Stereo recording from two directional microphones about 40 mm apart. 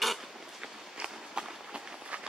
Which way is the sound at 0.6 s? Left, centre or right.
Centre.